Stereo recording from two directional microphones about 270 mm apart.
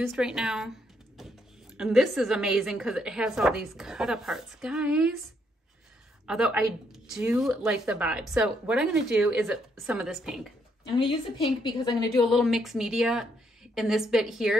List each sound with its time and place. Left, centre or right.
0.1 s a woman's voice: centre
6.2 s a woman's voice: centre
11.0 s a woman's voice: centre
12.2 s a woman's voice: centre